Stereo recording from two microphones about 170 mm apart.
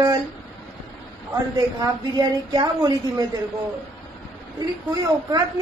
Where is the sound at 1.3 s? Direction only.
20° right (ahead or behind).